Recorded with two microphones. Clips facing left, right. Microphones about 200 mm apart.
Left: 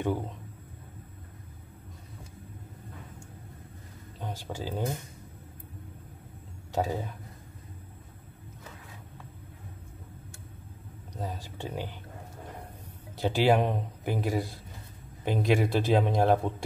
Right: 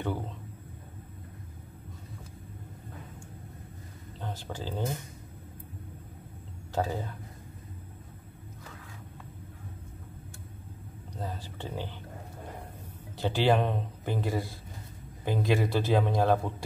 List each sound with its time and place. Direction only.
4.2 s speech: 10° left (ahead or behind)
6.7 s speech: 15° left (ahead or behind)
11.1 s a man's voice: 15° left (ahead or behind)
13.2 s a man's voice: 10° left (ahead or behind)